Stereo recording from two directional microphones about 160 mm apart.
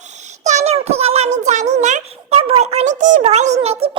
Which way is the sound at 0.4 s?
45° right (ahead or behind).